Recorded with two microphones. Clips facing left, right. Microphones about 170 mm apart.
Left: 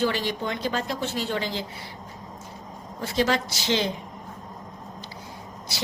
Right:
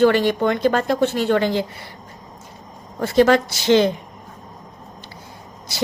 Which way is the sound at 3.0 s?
55° right (ahead or behind).